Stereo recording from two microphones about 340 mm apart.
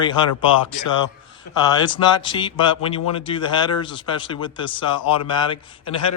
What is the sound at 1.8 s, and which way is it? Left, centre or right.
A man's voice, centre.